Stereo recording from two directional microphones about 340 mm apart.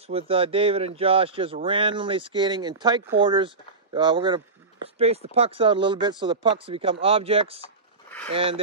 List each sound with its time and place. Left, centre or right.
0.3 s speech: centre